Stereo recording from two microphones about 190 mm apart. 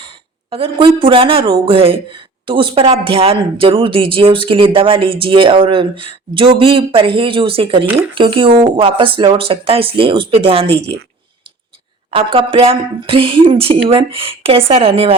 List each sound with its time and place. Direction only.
0.5 s speech: 30° right (ahead or behind)
12.1 s speech: 25° right (ahead or behind)